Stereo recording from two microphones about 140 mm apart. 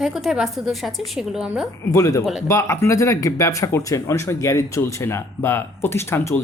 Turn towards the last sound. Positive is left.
turn(degrees=15)  # may be behind; listen again after turning